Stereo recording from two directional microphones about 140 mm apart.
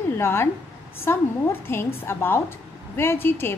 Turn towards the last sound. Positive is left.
turn(degrees=15)  # may be behind; listen again after turning